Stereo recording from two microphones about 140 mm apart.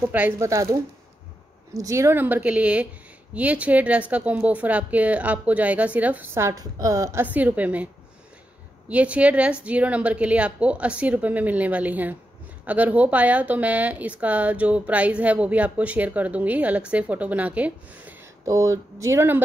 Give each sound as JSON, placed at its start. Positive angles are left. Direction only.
{"t": 0.0, "sound": "speech", "side_deg": -15}
{"t": 18.4, "sound": "speech", "side_deg": -25}